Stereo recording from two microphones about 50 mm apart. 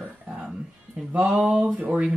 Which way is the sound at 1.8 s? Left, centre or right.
Right.